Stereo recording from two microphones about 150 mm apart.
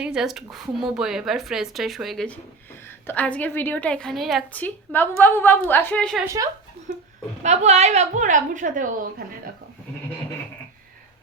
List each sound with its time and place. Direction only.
0.0 s a woman's voice: 5° right (ahead or behind)
4.5 s a woman's voice: 10° left (ahead or behind)
6.2 s a woman's voice: 20° right (ahead or behind)
7.4 s a woman's voice: 50° right (ahead or behind); by 9.2 s 65° right (ahead or behind)